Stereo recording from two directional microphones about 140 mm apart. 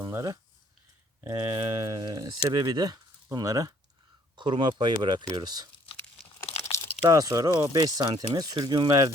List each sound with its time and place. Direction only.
0.0 s speech: 25° right (ahead or behind)
6.7 s crumpling: 20° left (ahead or behind)
7.0 s speech: 25° right (ahead or behind)